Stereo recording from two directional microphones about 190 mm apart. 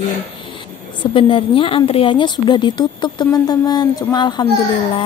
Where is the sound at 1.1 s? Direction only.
30° left (ahead or behind).